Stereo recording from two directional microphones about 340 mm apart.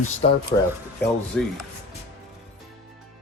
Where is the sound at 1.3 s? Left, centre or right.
Centre.